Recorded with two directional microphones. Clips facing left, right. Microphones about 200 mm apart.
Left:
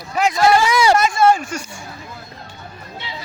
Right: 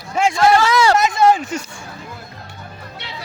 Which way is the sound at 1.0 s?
20° right (ahead or behind).